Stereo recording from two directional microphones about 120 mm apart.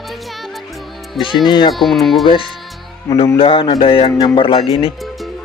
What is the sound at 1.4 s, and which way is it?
Speech, 40° left (ahead or behind).